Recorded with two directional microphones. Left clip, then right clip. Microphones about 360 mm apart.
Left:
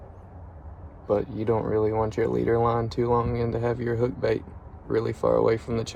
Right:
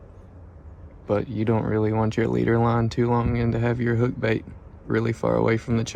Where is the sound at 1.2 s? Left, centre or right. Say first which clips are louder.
Even; right.